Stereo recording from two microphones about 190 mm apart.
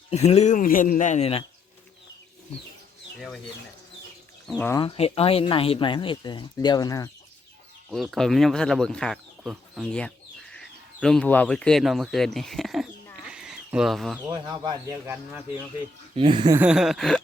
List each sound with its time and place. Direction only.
0.1 s a man's voice: 35° left (ahead or behind)
4.4 s speech: 10° left (ahead or behind)
4.8 s speech: 30° left (ahead or behind)
7.9 s speech: centre (ahead or behind)
13.2 s a sound: 5° right (ahead or behind)
14.3 s speech: 20° right (ahead or behind)
15.1 s speech: 10° right (ahead or behind)
16.1 s speech: 25° right (ahead or behind)
16.6 s speech: 5° right (ahead or behind)